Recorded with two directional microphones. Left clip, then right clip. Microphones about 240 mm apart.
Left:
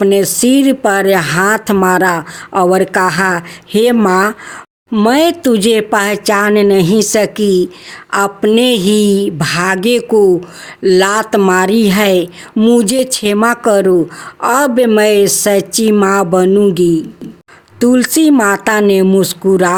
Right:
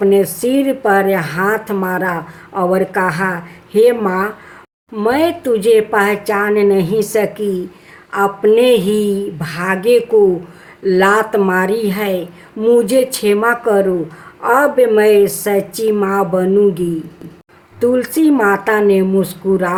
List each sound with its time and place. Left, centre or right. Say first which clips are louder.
0.0 s speech: left 2 dB; left